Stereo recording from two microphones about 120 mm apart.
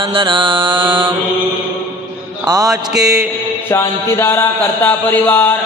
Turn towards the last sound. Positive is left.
turn(degrees=15)  # may be behind; listen again after turning